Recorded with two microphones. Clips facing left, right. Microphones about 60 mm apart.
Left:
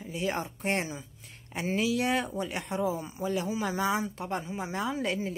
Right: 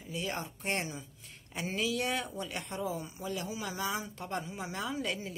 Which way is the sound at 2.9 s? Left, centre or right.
Left.